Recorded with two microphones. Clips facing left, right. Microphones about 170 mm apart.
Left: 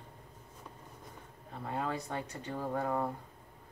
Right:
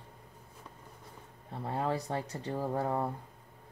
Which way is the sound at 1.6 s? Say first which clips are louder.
Right 3 dB; 30° right (ahead or behind).